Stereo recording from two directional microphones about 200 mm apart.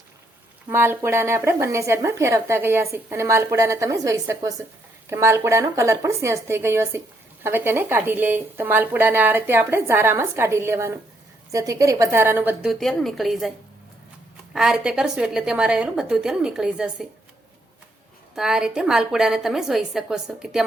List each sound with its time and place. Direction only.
0.7 s speech: 10° right (ahead or behind)
12.8 s a woman's voice: centre (ahead or behind)
14.5 s a woman's voice: centre (ahead or behind)
18.3 s a woman's voice: 5° right (ahead or behind)